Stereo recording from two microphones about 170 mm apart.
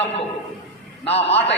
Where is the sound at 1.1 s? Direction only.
35° left (ahead or behind).